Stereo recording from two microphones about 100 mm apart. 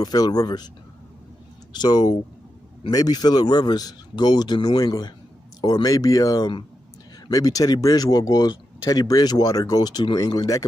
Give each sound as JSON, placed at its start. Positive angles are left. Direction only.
{"t": 0.0, "sound": "speech", "side_deg": 40}
{"t": 1.7, "sound": "a man's voice", "side_deg": 45}